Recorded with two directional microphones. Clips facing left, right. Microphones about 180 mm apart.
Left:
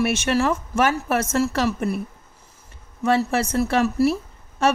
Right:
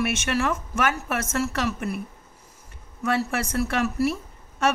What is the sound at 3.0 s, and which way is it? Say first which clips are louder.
Speech: left 5 dB; 25° left (ahead or behind).